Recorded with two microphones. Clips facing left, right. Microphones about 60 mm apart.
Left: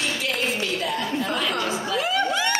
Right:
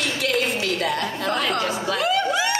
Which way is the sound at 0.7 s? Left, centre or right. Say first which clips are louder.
Right 1 dB; right.